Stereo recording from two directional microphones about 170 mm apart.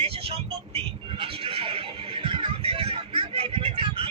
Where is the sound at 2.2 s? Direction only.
30° right (ahead or behind).